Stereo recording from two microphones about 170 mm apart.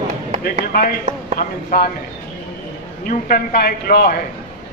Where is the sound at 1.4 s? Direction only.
60° left (ahead or behind).